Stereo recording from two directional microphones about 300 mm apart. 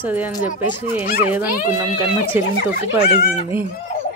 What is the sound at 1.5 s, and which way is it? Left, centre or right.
Speech, centre.